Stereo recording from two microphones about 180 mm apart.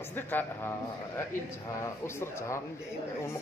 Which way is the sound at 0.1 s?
10° left (ahead or behind).